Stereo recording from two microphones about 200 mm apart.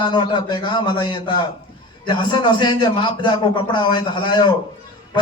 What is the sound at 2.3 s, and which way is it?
A man's voice, 20° left (ahead or behind).